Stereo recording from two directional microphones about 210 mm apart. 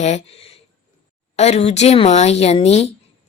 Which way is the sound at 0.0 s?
30° left (ahead or behind).